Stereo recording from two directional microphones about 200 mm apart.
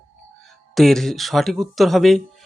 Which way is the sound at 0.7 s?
Centre (ahead or behind).